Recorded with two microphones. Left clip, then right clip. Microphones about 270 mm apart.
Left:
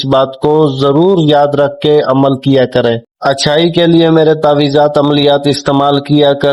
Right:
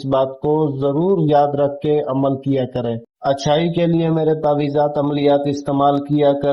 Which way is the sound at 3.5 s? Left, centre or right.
Left.